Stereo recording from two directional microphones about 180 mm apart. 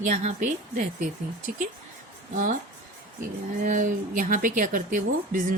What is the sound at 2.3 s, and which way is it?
Speech, 45° right (ahead or behind).